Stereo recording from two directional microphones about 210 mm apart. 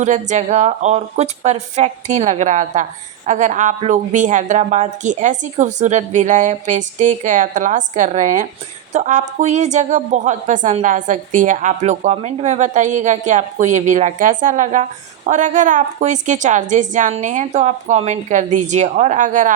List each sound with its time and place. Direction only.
0.0 s a woman's voice: 35° right (ahead or behind)